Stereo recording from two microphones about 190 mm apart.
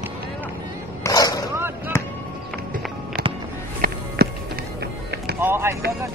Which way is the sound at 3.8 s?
55° right (ahead or behind).